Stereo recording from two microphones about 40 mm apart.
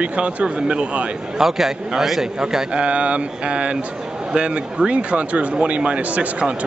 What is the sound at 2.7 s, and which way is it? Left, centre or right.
Speech, right.